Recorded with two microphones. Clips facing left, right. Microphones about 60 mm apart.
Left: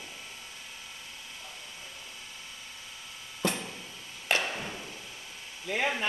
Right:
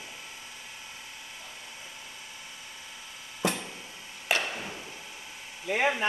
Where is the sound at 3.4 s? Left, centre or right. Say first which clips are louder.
Right 1 dB; centre.